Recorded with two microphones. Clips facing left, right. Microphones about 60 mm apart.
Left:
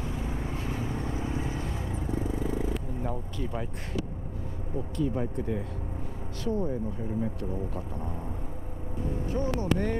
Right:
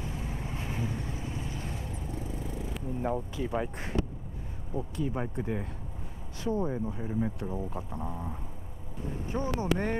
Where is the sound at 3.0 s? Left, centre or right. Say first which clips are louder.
Right 2 dB; centre.